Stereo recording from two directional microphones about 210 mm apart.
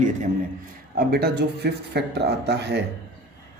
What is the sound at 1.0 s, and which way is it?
Speech, 50° right (ahead or behind).